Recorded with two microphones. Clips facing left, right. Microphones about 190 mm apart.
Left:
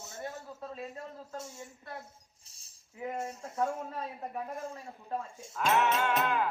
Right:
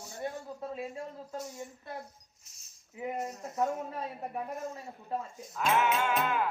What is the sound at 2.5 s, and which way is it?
Keys jangling, 30° left (ahead or behind).